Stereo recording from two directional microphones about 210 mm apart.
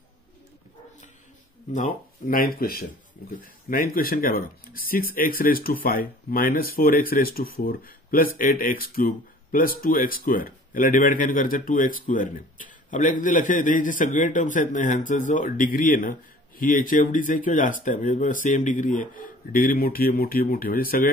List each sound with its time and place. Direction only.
1.7 s a man's voice: 40° left (ahead or behind)